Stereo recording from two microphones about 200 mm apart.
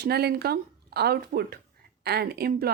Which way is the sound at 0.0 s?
55° right (ahead or behind).